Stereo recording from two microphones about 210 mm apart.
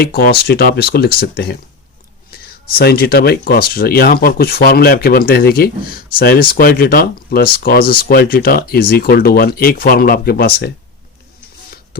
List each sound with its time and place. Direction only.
0.0 s speech: 45° left (ahead or behind)
2.7 s speech: 45° left (ahead or behind)